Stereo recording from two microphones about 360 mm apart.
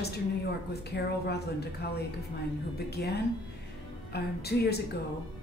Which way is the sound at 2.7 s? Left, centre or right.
Left.